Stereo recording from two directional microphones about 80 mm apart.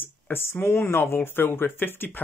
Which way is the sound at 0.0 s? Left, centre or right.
Left.